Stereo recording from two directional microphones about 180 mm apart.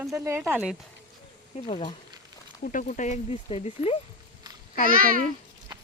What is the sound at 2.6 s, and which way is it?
Speech, 45° left (ahead or behind).